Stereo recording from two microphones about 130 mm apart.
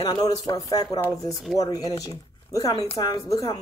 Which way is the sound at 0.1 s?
30° left (ahead or behind).